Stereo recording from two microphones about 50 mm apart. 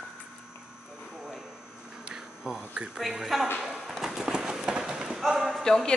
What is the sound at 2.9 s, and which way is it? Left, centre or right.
Speech, centre.